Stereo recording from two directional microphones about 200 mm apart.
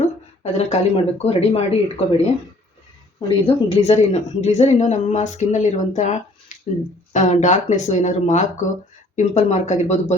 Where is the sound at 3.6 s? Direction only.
30° left (ahead or behind).